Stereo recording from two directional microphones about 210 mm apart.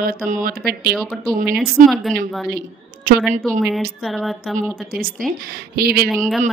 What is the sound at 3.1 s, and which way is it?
Speech, 40° right (ahead or behind).